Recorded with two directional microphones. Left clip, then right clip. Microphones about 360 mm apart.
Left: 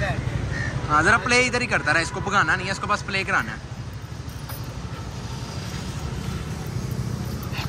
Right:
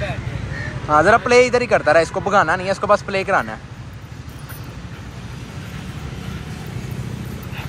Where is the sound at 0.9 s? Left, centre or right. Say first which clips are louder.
Right 6 dB; centre.